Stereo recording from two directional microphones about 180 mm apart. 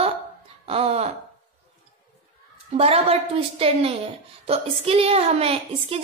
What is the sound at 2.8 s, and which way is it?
A woman's voice, 35° right (ahead or behind).